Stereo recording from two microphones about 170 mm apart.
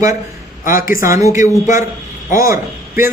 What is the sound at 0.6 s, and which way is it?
Speech, 50° left (ahead or behind).